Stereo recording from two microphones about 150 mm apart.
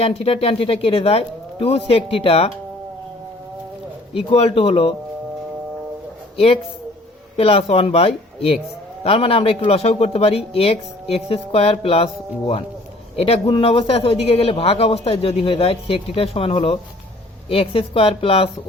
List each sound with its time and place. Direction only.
0.0 s a man's voice: 40° left (ahead or behind)
4.1 s a man's voice: 40° left (ahead or behind)
6.3 s a man's voice: 40° left (ahead or behind)
13.1 s a man's voice: 40° left (ahead or behind)